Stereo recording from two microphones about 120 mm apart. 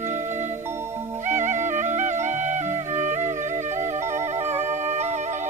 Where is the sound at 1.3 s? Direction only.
90° right; by 5.1 s 70° right (ahead or behind).